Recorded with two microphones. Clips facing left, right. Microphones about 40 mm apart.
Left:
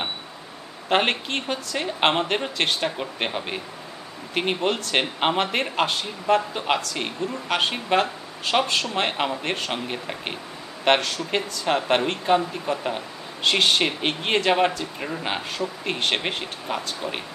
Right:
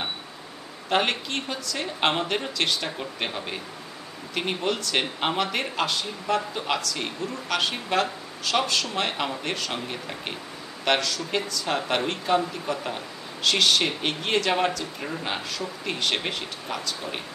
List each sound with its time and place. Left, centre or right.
0.8 s speech: left
2.5 s speech: left
3.3 s speech: left
4.6 s speech: left
4.9 s speech: left
10.9 s speech: left
11.6 s speech: left
13.4 s speech: left